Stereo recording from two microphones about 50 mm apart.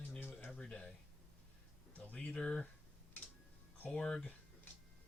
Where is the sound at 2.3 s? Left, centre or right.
Centre.